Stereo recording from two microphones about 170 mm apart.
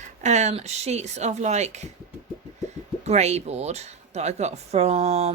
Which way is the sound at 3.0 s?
40° right (ahead or behind).